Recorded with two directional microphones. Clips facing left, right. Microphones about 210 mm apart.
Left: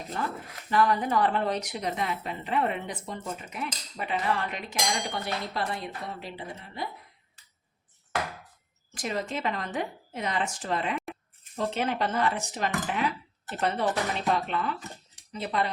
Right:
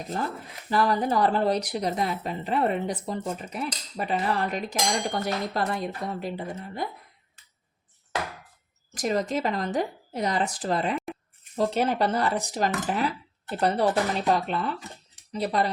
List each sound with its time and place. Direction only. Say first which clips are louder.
0.7 s speech: right 1 dB; 35° right (ahead or behind)
9.0 s speech: right 6 dB; 40° right (ahead or behind)